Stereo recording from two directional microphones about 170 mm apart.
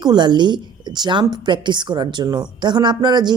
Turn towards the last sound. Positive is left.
turn(degrees=-25)  # may be behind; listen again after turning